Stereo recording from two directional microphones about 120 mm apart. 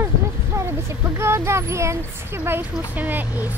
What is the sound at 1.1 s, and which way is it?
Speech, 20° right (ahead or behind).